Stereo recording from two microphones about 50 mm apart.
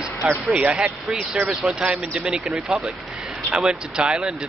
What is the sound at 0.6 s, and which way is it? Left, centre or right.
Speech, right.